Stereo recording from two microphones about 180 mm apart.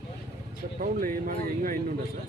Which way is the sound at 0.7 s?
50° right (ahead or behind).